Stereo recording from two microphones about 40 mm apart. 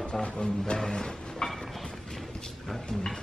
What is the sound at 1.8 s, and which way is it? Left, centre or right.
Mechanisms, centre.